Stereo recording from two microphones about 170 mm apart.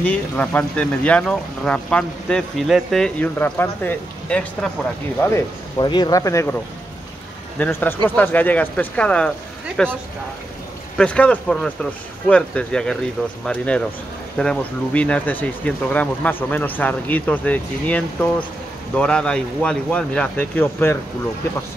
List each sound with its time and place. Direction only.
0.0 s speech: 10° left (ahead or behind)
7.5 s speech: 10° left (ahead or behind)
11.0 s speech: 5° left (ahead or behind)